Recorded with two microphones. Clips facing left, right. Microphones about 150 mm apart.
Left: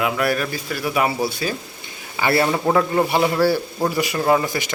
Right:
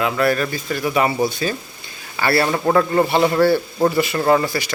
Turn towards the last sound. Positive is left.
turn(degrees=15)  # may be behind; listen again after turning